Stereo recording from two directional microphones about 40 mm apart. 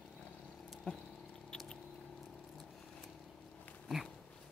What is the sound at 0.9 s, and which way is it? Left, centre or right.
Rodents, left.